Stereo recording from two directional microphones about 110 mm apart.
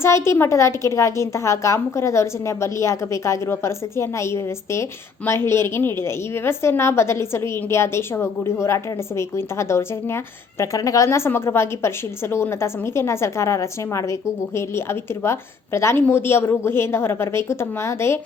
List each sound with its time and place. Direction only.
0.0 s a woman's voice: 25° left (ahead or behind)